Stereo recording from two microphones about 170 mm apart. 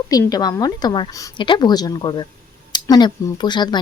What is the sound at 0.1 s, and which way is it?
Speech, 20° left (ahead or behind).